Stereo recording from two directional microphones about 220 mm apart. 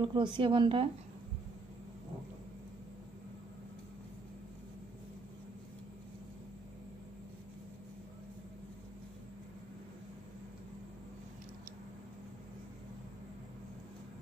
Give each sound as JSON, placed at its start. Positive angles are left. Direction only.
{"t": 0.0, "sound": "a woman's voice", "side_deg": -20}